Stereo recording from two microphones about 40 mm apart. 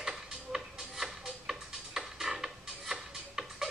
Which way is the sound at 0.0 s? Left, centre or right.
Centre.